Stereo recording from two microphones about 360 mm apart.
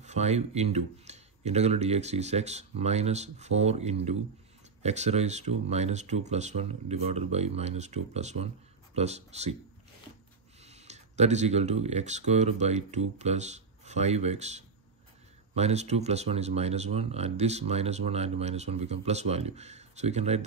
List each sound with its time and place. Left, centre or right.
0.0 s speech: centre
10.6 s speech: centre